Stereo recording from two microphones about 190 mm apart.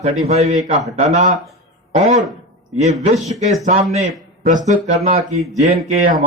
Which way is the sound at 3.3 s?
35° right (ahead or behind).